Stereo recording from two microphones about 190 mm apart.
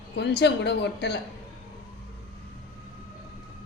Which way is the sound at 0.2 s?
65° left (ahead or behind).